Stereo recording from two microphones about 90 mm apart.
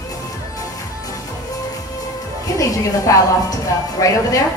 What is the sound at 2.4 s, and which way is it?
A woman's voice, 40° left (ahead or behind).